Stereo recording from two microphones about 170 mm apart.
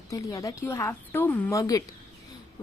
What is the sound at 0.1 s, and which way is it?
A woman's voice, 20° left (ahead or behind).